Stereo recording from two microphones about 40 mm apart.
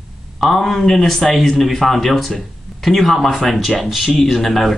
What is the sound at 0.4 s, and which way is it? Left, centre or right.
Speech, centre.